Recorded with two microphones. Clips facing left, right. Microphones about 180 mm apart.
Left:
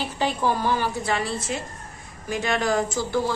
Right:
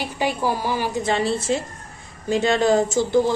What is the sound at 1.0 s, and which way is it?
A woman's voice, 25° right (ahead or behind).